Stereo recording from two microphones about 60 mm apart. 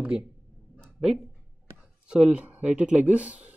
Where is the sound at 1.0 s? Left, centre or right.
Centre; by 3.5 s right.